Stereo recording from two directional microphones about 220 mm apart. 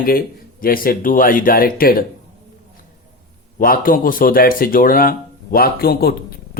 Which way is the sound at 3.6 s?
40° left (ahead or behind).